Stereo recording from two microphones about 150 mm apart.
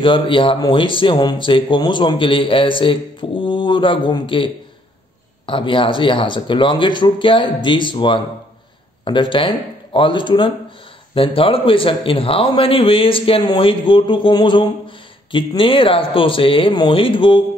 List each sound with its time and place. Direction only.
0.0 s a man's voice: 35° left (ahead or behind)
5.5 s a man's voice: 35° left (ahead or behind)